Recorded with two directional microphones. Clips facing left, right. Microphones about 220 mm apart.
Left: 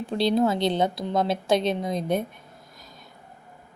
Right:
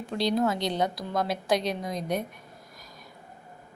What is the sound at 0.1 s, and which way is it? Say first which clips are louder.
A woman's voice: left 4 dB; 30° left (ahead or behind).